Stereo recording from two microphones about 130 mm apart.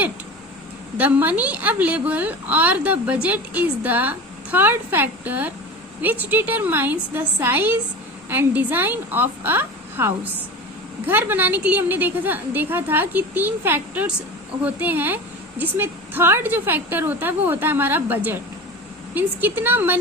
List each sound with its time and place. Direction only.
0.9 s a woman's voice: 10° right (ahead or behind)